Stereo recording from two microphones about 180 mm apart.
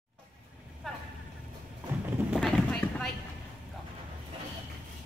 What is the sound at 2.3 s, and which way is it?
Clip-clop, centre (ahead or behind).